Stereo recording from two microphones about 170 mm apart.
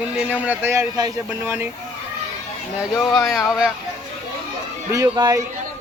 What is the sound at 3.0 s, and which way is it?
Speech, centre (ahead or behind).